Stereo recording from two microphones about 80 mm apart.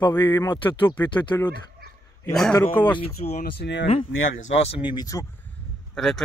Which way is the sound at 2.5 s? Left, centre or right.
Left.